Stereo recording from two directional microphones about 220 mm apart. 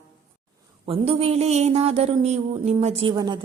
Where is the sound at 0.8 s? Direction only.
30° right (ahead or behind).